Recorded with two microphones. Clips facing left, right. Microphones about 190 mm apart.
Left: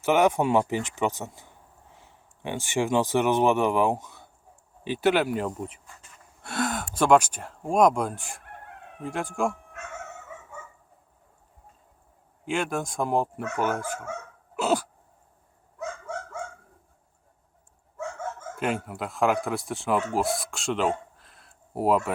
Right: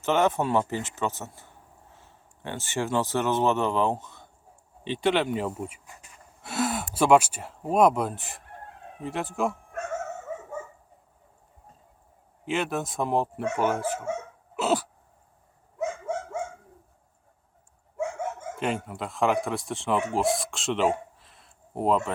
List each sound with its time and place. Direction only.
0.0 s speech: 10° left (ahead or behind); by 6.1 s 15° right (ahead or behind)
6.4 s speech: 5° right (ahead or behind)
8.4 s chicken: 60° left (ahead or behind)
9.0 s speech: centre (ahead or behind)
9.7 s dog: 45° right (ahead or behind)
12.5 s speech: centre (ahead or behind)
13.4 s speech: 30° right (ahead or behind)
14.0 s dog: 25° right (ahead or behind)
14.5 s a sound: centre (ahead or behind)
15.8 s dog: 20° right (ahead or behind)
17.9 s dog: 15° right (ahead or behind)
18.5 s speech: centre (ahead or behind)
20.1 s a sound: centre (ahead or behind)